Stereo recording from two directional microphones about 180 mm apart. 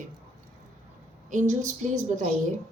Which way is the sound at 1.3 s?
45° right (ahead or behind).